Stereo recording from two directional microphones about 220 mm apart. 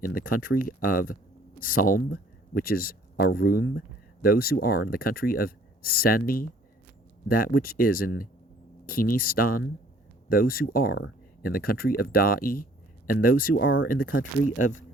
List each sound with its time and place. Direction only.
0.0 s speech: 40° left (ahead or behind)
13.6 s speech: 60° left (ahead or behind)
13.8 s speech: 40° left (ahead or behind)